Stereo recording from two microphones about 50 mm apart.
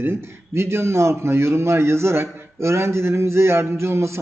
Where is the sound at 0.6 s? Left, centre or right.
Right.